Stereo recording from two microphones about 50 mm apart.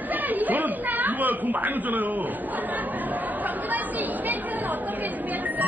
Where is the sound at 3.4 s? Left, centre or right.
Right.